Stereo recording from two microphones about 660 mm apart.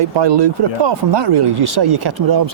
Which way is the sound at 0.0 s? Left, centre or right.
Right.